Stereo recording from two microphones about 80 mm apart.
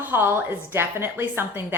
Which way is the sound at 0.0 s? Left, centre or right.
Right.